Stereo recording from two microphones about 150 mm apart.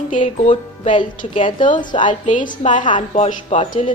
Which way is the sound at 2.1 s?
55° left (ahead or behind).